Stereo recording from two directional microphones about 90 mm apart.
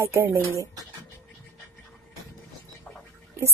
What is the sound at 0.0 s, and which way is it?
Speech, 30° right (ahead or behind).